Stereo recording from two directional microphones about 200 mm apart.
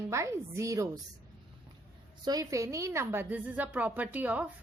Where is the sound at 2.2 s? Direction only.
20° right (ahead or behind).